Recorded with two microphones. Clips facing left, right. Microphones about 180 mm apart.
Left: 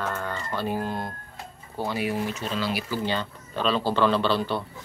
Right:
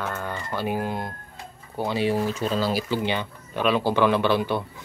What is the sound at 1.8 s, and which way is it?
Speech, 25° right (ahead or behind).